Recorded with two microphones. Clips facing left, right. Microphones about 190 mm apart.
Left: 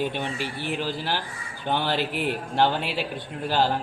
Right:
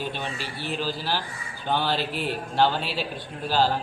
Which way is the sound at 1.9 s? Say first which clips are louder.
Left 2 dB; 55° left (ahead or behind).